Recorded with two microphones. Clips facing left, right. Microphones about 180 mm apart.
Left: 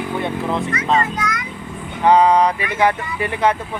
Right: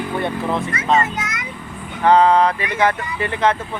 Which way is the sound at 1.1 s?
20° right (ahead or behind).